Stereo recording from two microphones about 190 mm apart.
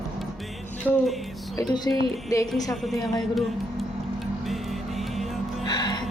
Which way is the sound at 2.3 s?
20° left (ahead or behind).